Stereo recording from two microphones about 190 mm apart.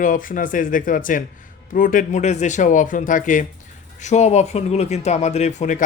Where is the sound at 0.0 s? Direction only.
45° left (ahead or behind).